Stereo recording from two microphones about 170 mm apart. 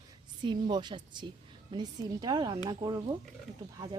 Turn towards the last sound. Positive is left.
turn(degrees=-25)  # may be behind; listen again after turning